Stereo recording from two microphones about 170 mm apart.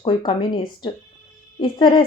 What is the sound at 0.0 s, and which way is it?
Speech, 30° left (ahead or behind).